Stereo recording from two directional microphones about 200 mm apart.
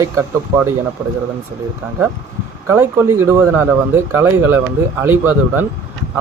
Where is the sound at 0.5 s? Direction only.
15° right (ahead or behind).